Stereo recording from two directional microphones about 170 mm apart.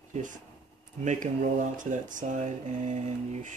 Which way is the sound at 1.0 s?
45° right (ahead or behind).